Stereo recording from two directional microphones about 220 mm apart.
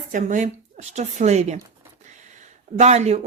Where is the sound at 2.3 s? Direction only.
30° right (ahead or behind).